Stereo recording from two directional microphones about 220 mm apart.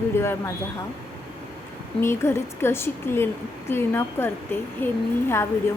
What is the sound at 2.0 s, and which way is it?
A woman's voice, 10° left (ahead or behind).